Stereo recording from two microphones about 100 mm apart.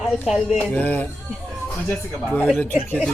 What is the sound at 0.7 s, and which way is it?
Speech, 15° left (ahead or behind).